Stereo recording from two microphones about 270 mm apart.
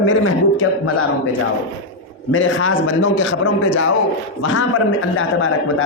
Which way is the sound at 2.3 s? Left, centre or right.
Left.